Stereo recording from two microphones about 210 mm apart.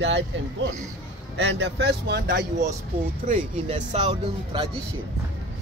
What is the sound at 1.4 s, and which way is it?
Speech, 55° right (ahead or behind).